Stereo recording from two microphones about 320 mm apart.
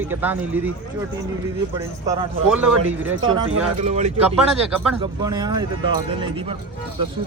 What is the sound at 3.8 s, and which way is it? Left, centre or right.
Speech, right.